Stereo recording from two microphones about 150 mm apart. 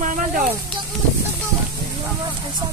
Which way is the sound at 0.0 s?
60° right (ahead or behind).